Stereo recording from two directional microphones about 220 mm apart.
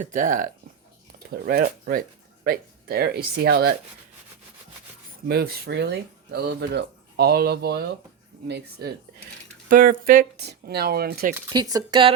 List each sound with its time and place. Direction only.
0.0 s speech: 35° right (ahead or behind)
5.3 s speech: 45° right (ahead or behind)
11.5 s speech: 20° right (ahead or behind)